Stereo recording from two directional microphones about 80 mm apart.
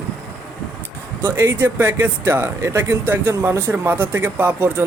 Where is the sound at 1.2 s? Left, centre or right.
Right.